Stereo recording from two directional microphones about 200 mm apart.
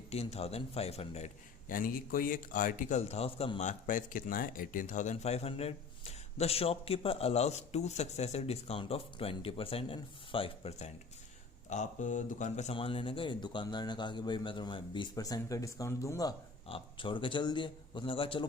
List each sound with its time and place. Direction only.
0.1 s a man's voice: 30° left (ahead or behind); by 16.3 s 15° left (ahead or behind)
16.6 s speech: 25° left (ahead or behind)